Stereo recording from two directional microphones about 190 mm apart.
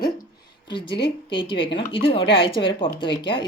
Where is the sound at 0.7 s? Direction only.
25° left (ahead or behind).